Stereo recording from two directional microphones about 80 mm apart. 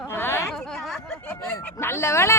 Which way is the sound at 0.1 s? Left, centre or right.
Left.